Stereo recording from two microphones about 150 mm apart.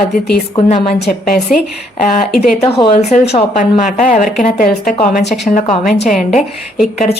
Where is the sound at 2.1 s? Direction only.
45° left (ahead or behind).